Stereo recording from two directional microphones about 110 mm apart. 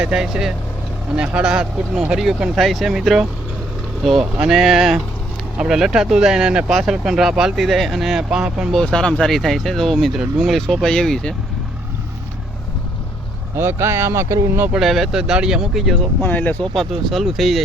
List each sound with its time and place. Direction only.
0.0 s speech: 5° right (ahead or behind)
8.8 s speech: 10° left (ahead or behind)
13.6 s speech: 20° right (ahead or behind)
14.7 s speech: centre (ahead or behind)
16.2 s speech: 15° left (ahead or behind)
16.7 s speech: centre (ahead or behind)